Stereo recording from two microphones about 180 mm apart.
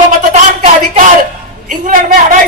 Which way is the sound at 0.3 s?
40° right (ahead or behind).